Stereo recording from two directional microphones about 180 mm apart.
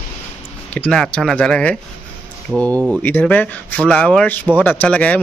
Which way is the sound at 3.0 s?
10° left (ahead or behind).